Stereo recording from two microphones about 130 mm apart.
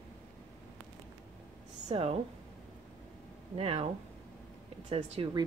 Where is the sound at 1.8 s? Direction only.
50° right (ahead or behind).